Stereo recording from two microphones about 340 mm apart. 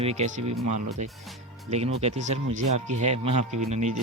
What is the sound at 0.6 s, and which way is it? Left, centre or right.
Speech, right.